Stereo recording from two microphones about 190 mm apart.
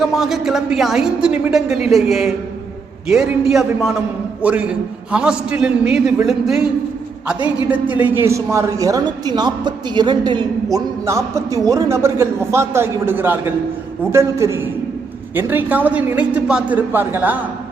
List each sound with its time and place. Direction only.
0.0 s a woman's voice: centre (ahead or behind)
7.7 s a woman's voice: 10° right (ahead or behind)